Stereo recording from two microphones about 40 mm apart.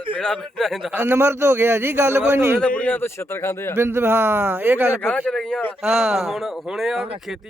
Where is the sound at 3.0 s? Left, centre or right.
Left.